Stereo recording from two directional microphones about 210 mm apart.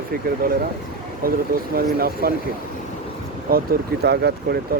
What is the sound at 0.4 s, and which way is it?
Speech, 45° right (ahead or behind).